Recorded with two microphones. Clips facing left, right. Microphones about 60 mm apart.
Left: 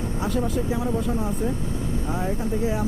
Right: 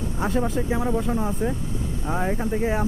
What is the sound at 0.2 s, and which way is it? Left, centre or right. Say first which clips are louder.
Speech: right 2 dB; right.